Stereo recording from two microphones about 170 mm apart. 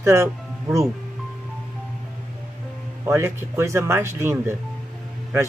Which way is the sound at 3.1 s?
15° right (ahead or behind).